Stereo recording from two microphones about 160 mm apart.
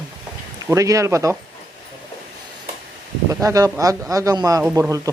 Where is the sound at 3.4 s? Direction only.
20° right (ahead or behind).